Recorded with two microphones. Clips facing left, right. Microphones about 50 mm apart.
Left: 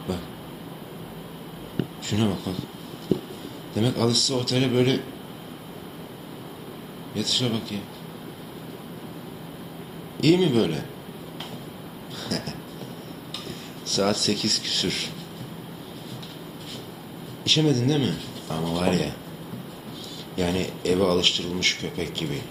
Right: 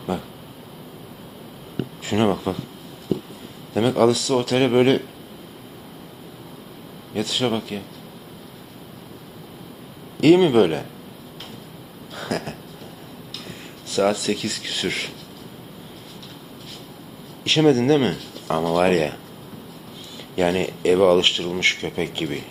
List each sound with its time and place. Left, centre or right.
0.1 s a man's voice: right
2.0 s a man's voice: right
3.8 s a man's voice: right
7.1 s speech: right
10.2 s a man's voice: right
12.1 s a sound: right
13.8 s speech: centre
14.8 s speech: right
17.4 s a man's voice: right
20.3 s speech: right